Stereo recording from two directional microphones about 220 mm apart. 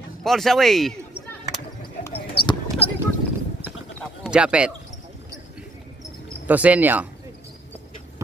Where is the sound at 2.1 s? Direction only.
25° left (ahead or behind).